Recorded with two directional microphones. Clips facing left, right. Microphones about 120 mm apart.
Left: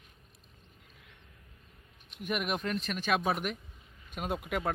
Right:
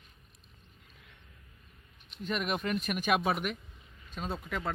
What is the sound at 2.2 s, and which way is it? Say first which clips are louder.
Speech: even; 10° left (ahead or behind).